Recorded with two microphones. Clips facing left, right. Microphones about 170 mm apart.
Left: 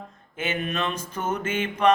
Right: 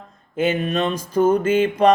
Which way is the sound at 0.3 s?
35° right (ahead or behind).